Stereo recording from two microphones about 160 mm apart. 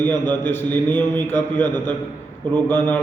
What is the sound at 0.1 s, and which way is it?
Speech, 25° right (ahead or behind).